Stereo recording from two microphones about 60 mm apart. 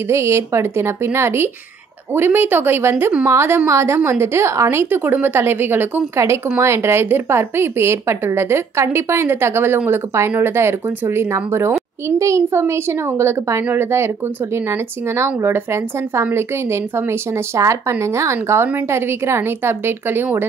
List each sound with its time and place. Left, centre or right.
0.1 s a woman's voice: right
6.1 s a woman's voice: right
17.6 s a woman's voice: right